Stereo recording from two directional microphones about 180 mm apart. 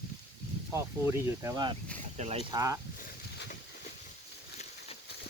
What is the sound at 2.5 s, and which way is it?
Speech, 20° right (ahead or behind).